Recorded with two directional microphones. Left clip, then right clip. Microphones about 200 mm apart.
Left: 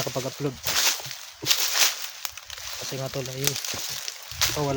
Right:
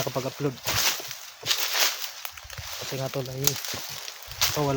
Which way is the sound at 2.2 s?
10° left (ahead or behind).